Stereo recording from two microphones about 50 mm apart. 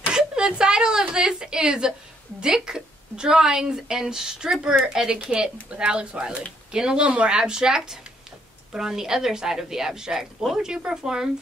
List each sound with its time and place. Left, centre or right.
0.4 s a woman's voice: centre
7.1 s speech: right
7.3 s a woman's voice: centre